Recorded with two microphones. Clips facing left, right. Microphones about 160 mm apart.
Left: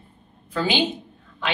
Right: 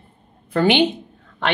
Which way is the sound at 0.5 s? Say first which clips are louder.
Right 7 dB; 65° right (ahead or behind).